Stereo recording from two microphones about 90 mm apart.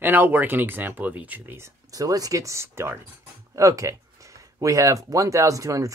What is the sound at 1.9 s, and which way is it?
Speech, 40° right (ahead or behind).